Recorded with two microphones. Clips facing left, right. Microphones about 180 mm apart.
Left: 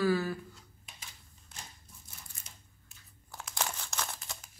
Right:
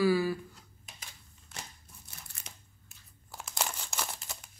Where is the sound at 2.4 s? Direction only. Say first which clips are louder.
Right 5 dB; 75° right (ahead or behind).